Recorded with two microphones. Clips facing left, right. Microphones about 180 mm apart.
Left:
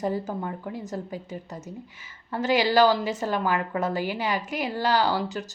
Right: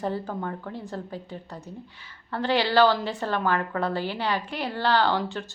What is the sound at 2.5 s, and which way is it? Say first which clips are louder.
A woman's voice: left 1 dB; 10° left (ahead or behind).